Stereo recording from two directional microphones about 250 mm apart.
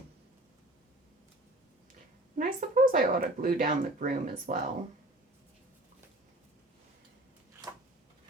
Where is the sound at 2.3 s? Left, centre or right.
Right.